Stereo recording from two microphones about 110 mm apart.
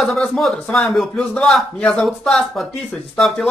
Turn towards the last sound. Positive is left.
turn(degrees=0)  # may be behind; listen again after turning